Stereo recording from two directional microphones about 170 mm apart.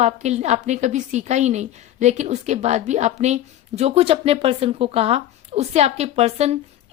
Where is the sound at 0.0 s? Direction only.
40° right (ahead or behind).